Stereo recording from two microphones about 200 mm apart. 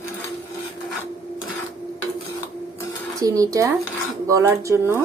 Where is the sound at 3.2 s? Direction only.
15° right (ahead or behind).